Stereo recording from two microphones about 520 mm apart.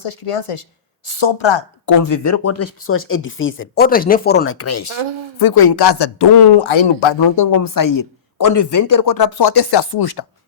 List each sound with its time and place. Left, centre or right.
0.0 s a woman's voice: left
1.0 s speech: left
1.9 s speech: left
4.9 s speech: right
5.4 s speech: left
6.7 s speech: left